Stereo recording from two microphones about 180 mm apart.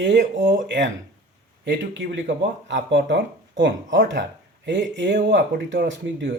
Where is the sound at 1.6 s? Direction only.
90° right.